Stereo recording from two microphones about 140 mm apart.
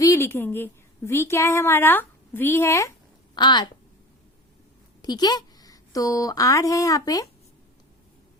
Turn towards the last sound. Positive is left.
turn(degrees=25)  # may be behind; listen again after turning